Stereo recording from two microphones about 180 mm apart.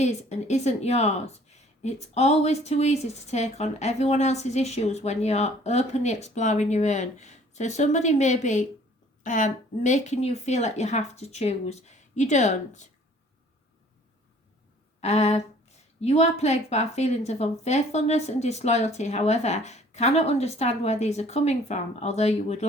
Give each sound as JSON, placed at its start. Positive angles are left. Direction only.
{"t": 0.0, "sound": "speech", "side_deg": 40}
{"t": 15.0, "sound": "speech", "side_deg": 40}